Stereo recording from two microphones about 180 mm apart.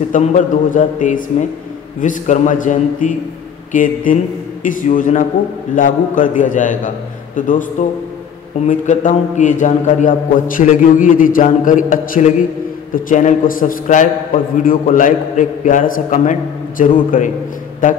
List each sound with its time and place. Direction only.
0.1 s a man's voice: 45° left (ahead or behind)
8.6 s a man's voice: 45° left (ahead or behind)